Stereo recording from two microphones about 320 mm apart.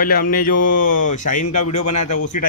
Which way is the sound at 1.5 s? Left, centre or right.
Left.